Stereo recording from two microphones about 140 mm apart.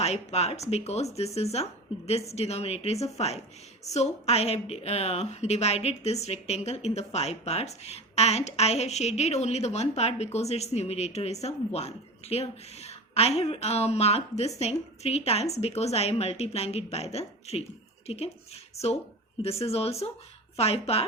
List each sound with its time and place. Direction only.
0.0 s a woman's voice: 50° left (ahead or behind)